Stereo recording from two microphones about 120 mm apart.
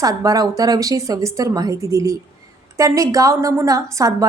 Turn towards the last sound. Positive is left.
turn(degrees=-30)  # may be behind; listen again after turning